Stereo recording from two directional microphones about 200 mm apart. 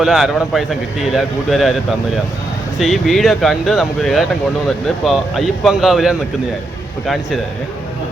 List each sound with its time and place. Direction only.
0.0 s a man's voice: centre (ahead or behind)
2.7 s a man's voice: centre (ahead or behind)